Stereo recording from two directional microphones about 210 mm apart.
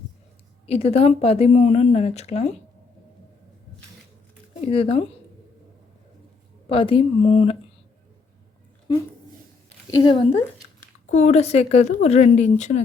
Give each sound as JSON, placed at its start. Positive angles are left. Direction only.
{"t": 0.7, "sound": "a woman's voice", "side_deg": 30}
{"t": 4.7, "sound": "speech", "side_deg": 25}
{"t": 6.7, "sound": "speech", "side_deg": 25}
{"t": 9.6, "sound": "a sound", "side_deg": 15}
{"t": 11.1, "sound": "a woman's voice", "side_deg": 35}